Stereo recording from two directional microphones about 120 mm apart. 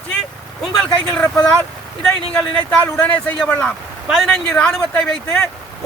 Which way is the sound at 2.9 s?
15° left (ahead or behind).